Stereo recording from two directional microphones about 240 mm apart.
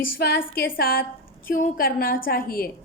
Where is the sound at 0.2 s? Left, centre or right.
Left.